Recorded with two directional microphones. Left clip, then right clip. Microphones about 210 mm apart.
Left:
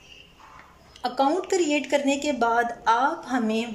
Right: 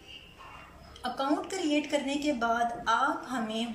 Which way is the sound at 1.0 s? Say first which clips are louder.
Left 7 dB; 40° left (ahead or behind).